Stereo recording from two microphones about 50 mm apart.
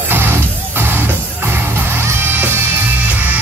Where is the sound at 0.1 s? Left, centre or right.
Right.